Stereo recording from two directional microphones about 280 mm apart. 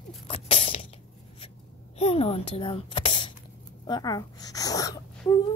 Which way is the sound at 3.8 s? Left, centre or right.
Centre.